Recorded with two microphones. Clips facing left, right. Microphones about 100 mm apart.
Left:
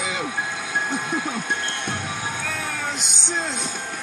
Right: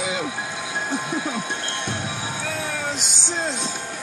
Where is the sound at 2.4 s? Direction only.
45° left (ahead or behind).